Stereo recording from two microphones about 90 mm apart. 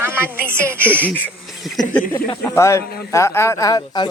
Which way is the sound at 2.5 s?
30° left (ahead or behind).